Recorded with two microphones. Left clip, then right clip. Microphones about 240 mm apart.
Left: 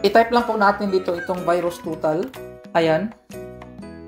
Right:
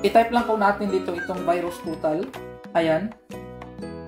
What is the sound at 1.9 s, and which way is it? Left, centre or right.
Speech, left.